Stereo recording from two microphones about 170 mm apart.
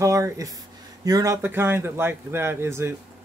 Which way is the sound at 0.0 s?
20° right (ahead or behind).